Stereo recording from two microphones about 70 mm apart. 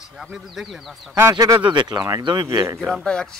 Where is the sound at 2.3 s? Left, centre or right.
Right.